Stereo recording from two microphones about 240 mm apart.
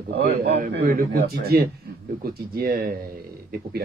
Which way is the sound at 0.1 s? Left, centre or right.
Right.